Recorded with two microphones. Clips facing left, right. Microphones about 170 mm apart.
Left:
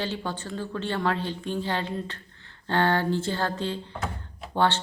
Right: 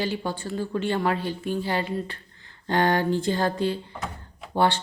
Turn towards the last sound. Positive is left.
turn(degrees=-10)  # may be behind; listen again after turning